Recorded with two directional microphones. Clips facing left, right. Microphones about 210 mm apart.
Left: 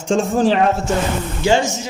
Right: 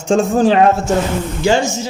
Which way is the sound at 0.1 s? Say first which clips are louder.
Right 3 dB; 45° right (ahead or behind).